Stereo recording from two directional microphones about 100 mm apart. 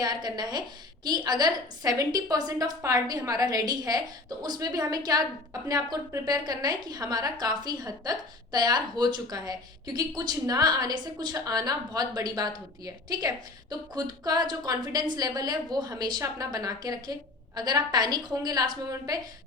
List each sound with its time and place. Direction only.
0.0 s a woman's voice: 45° right (ahead or behind)